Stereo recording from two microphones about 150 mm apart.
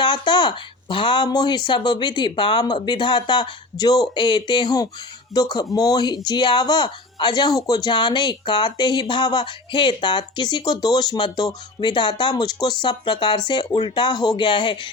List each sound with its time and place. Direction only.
0.0 s speech: 30° left (ahead or behind)